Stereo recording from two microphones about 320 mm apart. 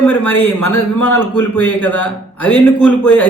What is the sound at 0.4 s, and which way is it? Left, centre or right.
Speech, left.